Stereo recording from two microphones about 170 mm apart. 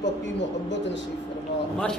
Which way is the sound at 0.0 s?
90° left.